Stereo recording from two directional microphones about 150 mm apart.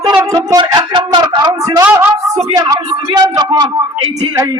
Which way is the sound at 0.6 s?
30° right (ahead or behind).